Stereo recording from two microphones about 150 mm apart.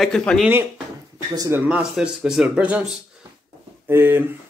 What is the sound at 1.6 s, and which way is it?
Speech, 10° right (ahead or behind).